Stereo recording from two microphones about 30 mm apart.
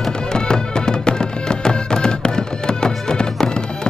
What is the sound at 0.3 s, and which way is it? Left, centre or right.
Music, left.